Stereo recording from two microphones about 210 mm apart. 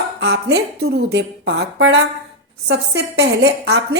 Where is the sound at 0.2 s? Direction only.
55° right (ahead or behind).